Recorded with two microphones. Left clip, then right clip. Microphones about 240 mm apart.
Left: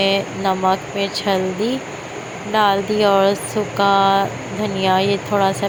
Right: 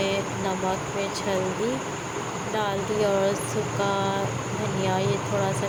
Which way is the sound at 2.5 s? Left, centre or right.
Centre.